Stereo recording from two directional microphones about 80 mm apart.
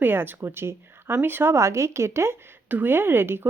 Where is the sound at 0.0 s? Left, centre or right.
Right.